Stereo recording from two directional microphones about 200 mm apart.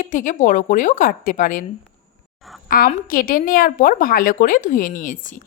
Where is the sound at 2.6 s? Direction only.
45° left (ahead or behind).